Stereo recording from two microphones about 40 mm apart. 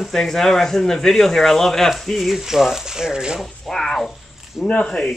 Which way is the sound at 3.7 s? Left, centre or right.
Centre.